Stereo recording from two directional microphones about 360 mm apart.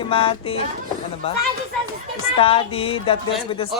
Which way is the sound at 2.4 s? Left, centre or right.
Centre.